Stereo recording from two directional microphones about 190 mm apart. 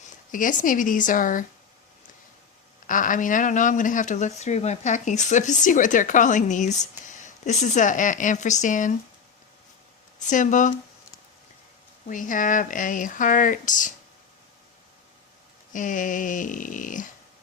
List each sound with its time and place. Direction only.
0.3 s speech: 45° left (ahead or behind)
2.8 s speech: 45° left (ahead or behind)
10.2 s speech: 40° left (ahead or behind)
12.0 s speech: 45° left (ahead or behind)
15.7 s speech: 45° left (ahead or behind)